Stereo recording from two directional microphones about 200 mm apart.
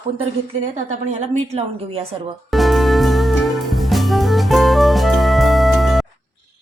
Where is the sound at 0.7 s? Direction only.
35° right (ahead or behind).